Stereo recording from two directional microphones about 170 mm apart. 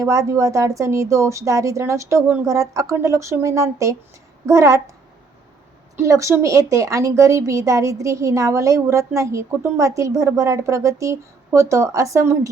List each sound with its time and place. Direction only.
0.0 s a woman's voice: 20° right (ahead or behind)
6.0 s a woman's voice: 15° right (ahead or behind)